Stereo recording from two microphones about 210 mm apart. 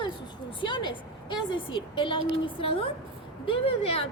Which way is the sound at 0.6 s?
20° left (ahead or behind).